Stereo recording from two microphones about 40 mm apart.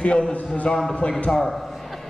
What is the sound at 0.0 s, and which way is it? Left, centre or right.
A man's voice, left.